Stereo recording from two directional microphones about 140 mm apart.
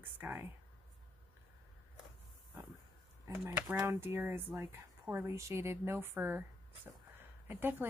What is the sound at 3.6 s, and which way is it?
A woman's voice, 25° right (ahead or behind).